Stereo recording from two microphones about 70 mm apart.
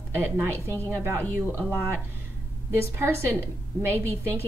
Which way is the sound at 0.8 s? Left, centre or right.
Right.